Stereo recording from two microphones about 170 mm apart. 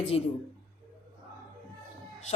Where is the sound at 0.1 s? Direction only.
35° left (ahead or behind).